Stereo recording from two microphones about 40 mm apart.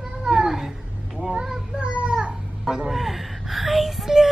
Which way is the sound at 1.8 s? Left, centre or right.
Right.